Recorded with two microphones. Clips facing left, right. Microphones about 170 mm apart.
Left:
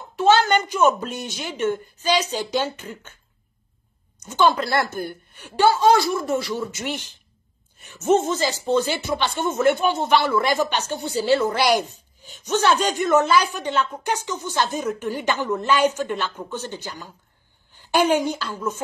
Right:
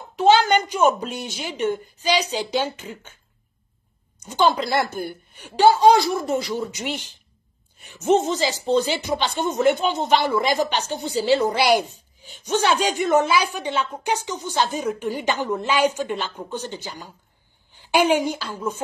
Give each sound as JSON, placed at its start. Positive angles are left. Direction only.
{"t": 0.2, "sound": "a woman's voice", "side_deg": -10}
{"t": 4.2, "sound": "a woman's voice", "side_deg": -15}
{"t": 9.7, "sound": "speech", "side_deg": 50}
{"t": 10.2, "sound": "a woman's voice", "side_deg": -15}